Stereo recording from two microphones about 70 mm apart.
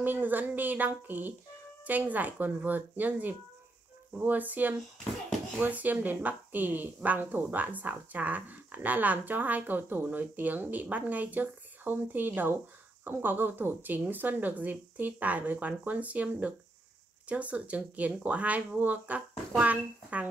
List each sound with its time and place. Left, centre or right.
0.0 s speech: right